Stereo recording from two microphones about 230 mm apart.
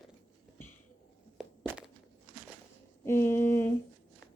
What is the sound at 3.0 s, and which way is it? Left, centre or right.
Speech, centre.